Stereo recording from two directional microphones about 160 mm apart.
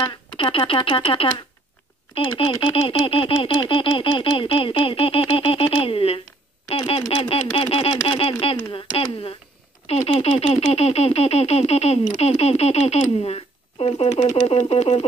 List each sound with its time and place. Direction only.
0.0 s speech: 30° left (ahead or behind)